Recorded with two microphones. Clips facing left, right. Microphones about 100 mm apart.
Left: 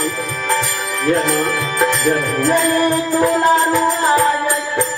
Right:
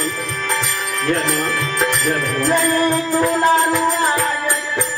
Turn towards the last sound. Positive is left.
turn(degrees=15)  # may be behind; listen again after turning